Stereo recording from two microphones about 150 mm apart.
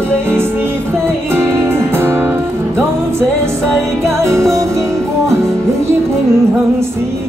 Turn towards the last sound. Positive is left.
turn(degrees=-20)  # may be behind; listen again after turning